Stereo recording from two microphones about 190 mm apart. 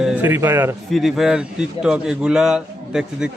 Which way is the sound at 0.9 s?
Centre (ahead or behind).